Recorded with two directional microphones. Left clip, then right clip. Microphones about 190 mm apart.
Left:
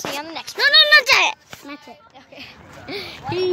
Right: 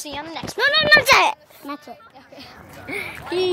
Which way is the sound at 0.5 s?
25° right (ahead or behind).